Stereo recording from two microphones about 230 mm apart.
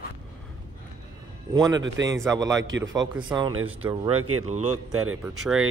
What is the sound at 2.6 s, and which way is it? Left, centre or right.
Speech, right.